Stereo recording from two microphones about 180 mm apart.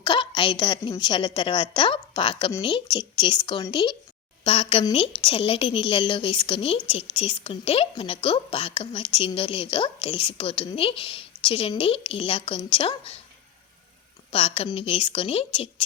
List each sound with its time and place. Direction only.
0.0 s a woman's voice: 25° left (ahead or behind)
14.3 s a woman's voice: 30° left (ahead or behind)